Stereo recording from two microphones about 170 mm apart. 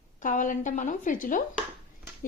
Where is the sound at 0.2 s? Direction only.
50° left (ahead or behind).